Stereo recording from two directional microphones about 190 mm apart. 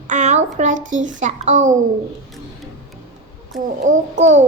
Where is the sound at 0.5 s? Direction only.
40° right (ahead or behind).